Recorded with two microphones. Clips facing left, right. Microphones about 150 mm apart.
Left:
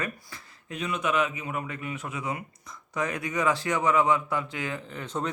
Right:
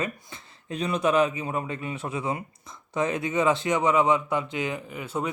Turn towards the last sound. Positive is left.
turn(degrees=-10)  # may be behind; listen again after turning